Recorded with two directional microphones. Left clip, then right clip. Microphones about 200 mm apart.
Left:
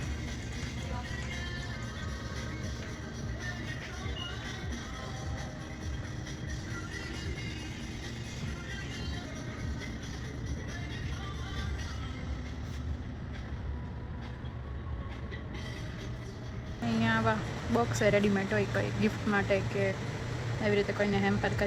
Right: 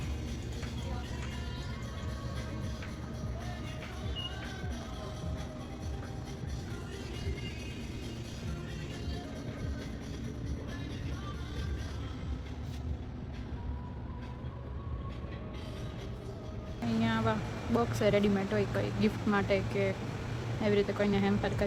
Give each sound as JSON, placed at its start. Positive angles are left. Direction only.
{"t": 17.0, "sound": "music", "side_deg": -10}
{"t": 17.7, "sound": "speech", "side_deg": -5}